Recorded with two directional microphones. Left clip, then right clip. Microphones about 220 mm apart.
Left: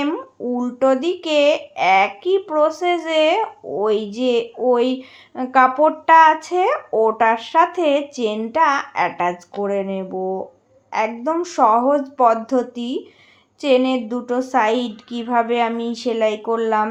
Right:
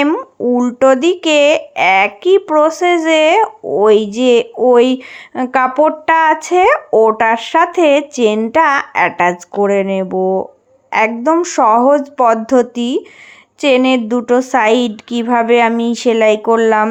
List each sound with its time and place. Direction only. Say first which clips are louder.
0.0 s speech: right 9 dB; 40° right (ahead or behind)